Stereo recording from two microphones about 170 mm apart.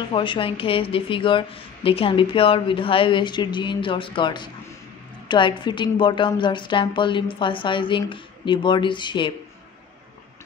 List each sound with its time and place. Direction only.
0.1 s a woman's voice: 30° left (ahead or behind)